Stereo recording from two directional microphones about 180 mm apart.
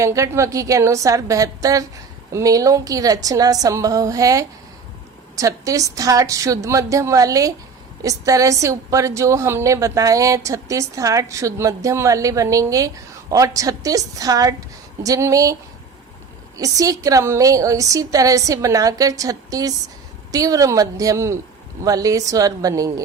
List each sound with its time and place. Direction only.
0.0 s a woman's voice: 15° right (ahead or behind)
16.6 s a woman's voice: 20° right (ahead or behind)